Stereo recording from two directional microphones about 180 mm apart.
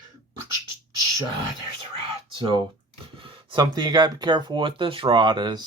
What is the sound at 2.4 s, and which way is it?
Speech, 25° right (ahead or behind).